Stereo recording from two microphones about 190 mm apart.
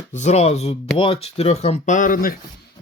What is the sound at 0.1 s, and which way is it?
Speech, 35° left (ahead or behind).